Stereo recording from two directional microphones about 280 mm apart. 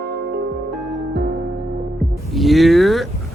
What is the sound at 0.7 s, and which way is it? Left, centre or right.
Music, centre.